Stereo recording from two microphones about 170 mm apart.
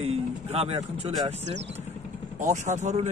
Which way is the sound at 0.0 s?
35° right (ahead or behind).